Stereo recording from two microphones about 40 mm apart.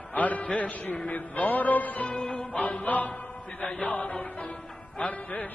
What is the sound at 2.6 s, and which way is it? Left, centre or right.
Speech, left.